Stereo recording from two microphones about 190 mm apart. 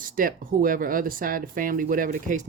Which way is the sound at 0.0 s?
45° right (ahead or behind).